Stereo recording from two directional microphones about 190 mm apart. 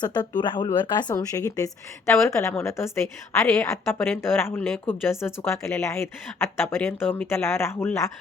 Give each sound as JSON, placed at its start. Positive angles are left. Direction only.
{"t": 0.0, "sound": "speech", "side_deg": 20}